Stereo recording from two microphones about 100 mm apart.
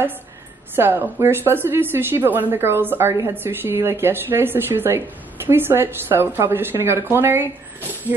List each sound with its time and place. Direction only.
0.7 s speech: 20° right (ahead or behind)